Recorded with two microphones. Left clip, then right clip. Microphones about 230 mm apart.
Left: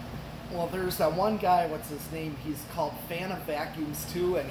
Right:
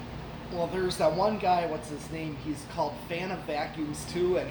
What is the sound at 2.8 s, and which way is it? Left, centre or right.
Speech, left.